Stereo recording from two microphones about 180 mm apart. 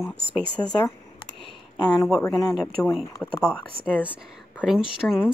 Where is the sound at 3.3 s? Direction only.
10° right (ahead or behind).